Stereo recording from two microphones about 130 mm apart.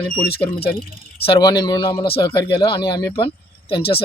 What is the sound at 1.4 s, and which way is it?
Speech, 30° left (ahead or behind).